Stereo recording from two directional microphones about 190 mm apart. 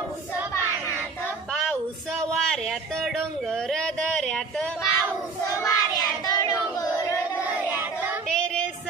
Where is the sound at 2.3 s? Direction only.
Centre (ahead or behind).